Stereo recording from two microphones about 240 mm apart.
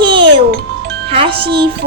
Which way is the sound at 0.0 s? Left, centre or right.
Centre.